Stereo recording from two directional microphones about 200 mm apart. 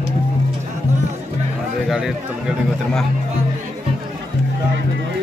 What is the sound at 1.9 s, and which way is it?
A man's voice, centre (ahead or behind).